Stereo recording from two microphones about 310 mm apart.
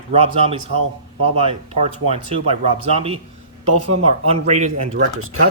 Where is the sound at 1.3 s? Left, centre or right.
Centre.